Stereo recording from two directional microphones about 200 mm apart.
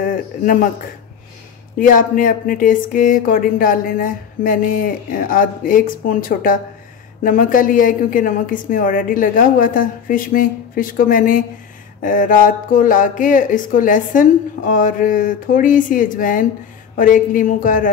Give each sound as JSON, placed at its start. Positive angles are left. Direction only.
{"t": 0.0, "sound": "a man's voice", "side_deg": 40}